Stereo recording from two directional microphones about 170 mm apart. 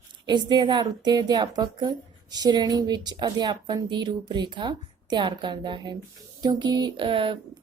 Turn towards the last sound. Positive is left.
turn(degrees=-30)  # may be behind; listen again after turning